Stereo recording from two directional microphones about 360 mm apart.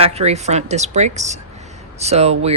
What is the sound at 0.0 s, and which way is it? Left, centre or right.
Speech, centre.